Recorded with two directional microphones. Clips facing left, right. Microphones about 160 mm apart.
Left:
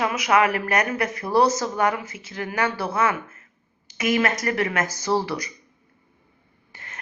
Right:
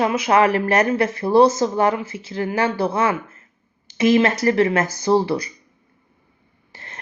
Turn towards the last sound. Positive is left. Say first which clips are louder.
# right 3 dB
turn(degrees=-30)  # may be behind; listen again after turning